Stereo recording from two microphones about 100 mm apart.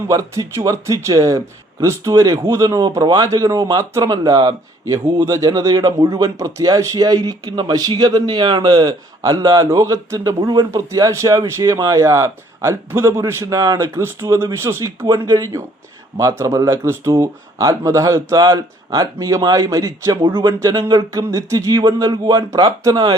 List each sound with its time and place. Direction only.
0.1 s a man's voice: 30° right (ahead or behind)